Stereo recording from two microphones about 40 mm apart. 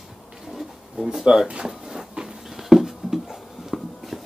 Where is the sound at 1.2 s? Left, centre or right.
Centre.